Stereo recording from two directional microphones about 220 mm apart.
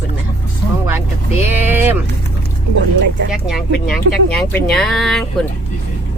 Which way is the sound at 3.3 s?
Centre (ahead or behind).